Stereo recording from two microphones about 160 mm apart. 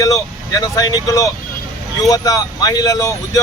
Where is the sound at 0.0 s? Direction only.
20° left (ahead or behind).